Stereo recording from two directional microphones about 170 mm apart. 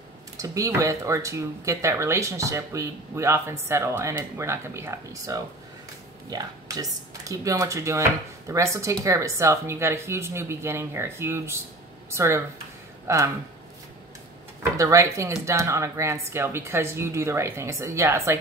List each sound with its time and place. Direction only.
0.4 s speech: 20° right (ahead or behind)
14.6 s speech: 20° right (ahead or behind)